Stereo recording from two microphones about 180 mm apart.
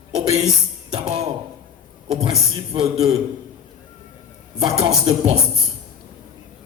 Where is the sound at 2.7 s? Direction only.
30° right (ahead or behind).